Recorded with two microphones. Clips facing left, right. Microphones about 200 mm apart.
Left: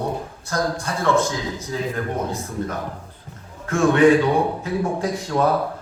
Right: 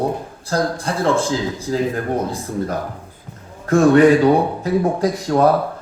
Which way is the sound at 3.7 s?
35° right (ahead or behind).